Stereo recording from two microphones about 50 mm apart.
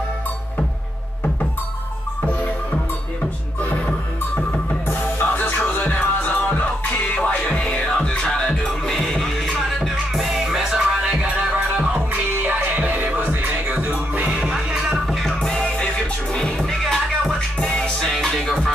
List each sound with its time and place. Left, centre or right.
5.2 s music: left; by 14.2 s right
14.2 s music: centre
15.0 s music: centre
15.4 s music: centre
17.6 s music: left